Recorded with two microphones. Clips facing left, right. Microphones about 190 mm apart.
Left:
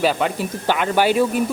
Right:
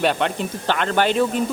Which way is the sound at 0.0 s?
5° left (ahead or behind).